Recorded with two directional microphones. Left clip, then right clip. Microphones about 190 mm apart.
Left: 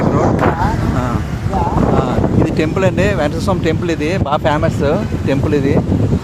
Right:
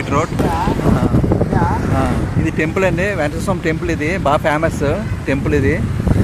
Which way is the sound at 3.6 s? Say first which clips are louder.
Left 2 dB; 65° left (ahead or behind).